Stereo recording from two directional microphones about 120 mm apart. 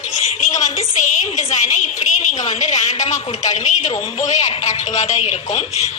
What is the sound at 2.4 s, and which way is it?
A woman's voice, 75° left (ahead or behind).